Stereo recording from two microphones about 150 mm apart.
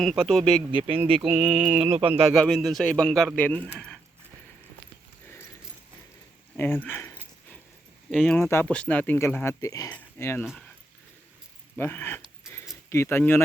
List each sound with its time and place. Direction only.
0.0 s speech: centre (ahead or behind)
0.9 s a sound: 35° right (ahead or behind)
1.4 s mantra: 5° right (ahead or behind)
1.8 s a sound: 40° right (ahead or behind)
2.3 s speech: centre (ahead or behind)
3.8 s a sound: 5° left (ahead or behind)
6.6 s speech: 15° left (ahead or behind)
8.1 s speech: 5° left (ahead or behind)
11.8 s speech: 15° left (ahead or behind)
12.4 s keys jangling: 5° right (ahead or behind)
12.9 s speech: 15° left (ahead or behind)